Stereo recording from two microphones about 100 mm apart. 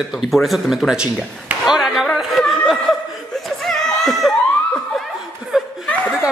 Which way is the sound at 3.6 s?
5° left (ahead or behind).